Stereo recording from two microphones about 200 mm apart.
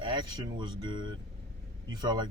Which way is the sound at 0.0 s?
20° right (ahead or behind).